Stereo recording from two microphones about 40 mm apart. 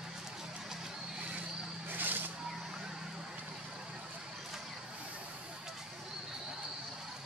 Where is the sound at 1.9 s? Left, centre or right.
Right.